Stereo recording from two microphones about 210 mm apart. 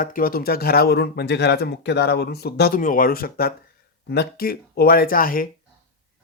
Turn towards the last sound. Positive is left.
turn(degrees=45)  # may be behind; listen again after turning